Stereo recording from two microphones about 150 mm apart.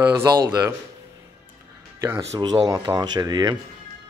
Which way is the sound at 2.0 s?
20° right (ahead or behind).